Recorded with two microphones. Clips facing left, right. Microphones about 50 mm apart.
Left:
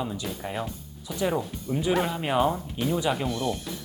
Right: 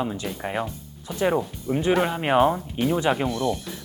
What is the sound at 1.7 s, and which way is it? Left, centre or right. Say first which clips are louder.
Speech: right 4 dB; right.